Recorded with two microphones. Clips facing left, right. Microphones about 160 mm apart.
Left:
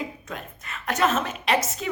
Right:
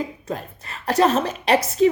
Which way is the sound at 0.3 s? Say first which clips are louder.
Right 6 dB; 35° right (ahead or behind).